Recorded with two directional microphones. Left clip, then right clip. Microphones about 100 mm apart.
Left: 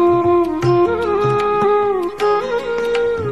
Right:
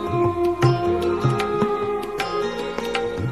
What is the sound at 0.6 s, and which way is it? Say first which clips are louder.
Music: left 6 dB; 25° left (ahead or behind).